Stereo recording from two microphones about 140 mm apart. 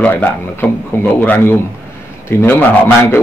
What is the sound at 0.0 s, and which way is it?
A man's voice, 15° left (ahead or behind).